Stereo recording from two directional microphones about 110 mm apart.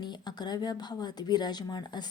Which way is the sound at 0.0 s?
40° left (ahead or behind).